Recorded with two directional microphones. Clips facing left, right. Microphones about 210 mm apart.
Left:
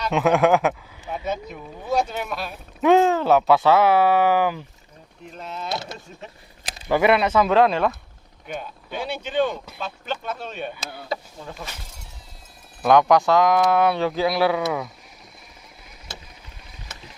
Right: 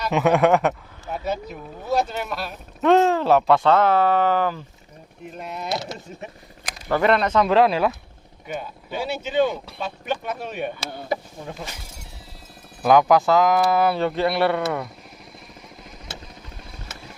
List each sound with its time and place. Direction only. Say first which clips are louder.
0.0 s speech: even; centre (ahead or behind)
5.2 s speech: right 1 dB; 15° right (ahead or behind)
6.8 s speech: left 1 dB; 10° left (ahead or behind); by 11.7 s 25° right (ahead or behind)
12.8 s speech: even; 5° right (ahead or behind)